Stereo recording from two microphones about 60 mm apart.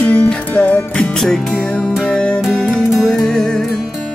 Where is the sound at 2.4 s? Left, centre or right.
Centre.